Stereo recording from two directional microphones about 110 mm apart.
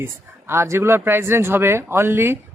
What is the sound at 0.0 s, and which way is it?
Speech, 20° right (ahead or behind).